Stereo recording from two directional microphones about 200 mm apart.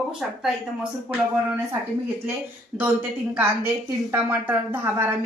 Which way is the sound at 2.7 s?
Centre (ahead or behind).